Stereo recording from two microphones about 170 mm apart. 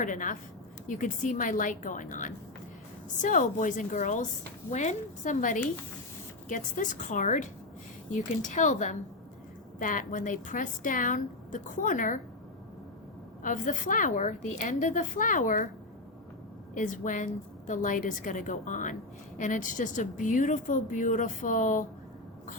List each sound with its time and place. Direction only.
0.0 s a woman's voice: 50° left (ahead or behind)
13.4 s a woman's voice: 50° left (ahead or behind)
16.7 s a woman's voice: 50° left (ahead or behind)